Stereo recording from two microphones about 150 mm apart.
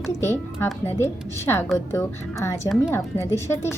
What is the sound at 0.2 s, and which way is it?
A woman's voice, 15° left (ahead or behind).